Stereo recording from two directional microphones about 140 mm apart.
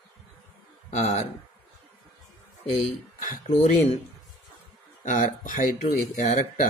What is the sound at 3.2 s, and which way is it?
Speech, 60° left (ahead or behind).